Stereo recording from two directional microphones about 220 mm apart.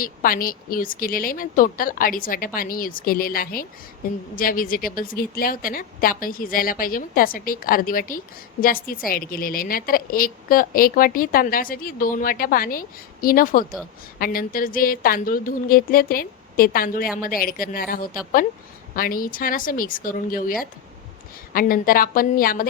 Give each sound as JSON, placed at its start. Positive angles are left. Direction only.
{"t": 0.0, "sound": "a woman's voice", "side_deg": 40}